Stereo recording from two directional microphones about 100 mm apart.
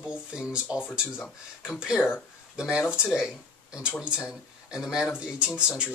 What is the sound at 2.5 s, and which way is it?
Speech, 5° right (ahead or behind).